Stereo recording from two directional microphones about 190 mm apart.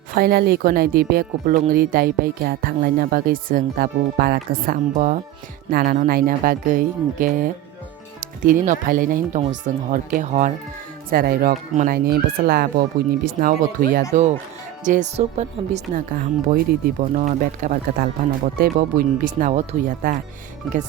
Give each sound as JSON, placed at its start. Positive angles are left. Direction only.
{"t": 0.2, "sound": "speech", "side_deg": -55}
{"t": 12.0, "sound": "speech", "side_deg": -55}
{"t": 16.5, "sound": "speech", "side_deg": -50}